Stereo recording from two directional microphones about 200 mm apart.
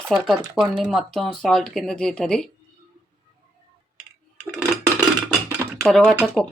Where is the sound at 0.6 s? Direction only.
Centre (ahead or behind).